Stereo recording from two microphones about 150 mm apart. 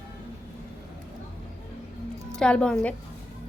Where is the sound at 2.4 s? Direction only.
5° left (ahead or behind).